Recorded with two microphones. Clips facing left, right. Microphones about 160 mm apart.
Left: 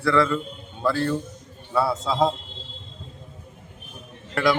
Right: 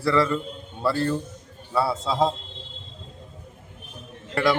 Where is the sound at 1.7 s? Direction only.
Centre (ahead or behind).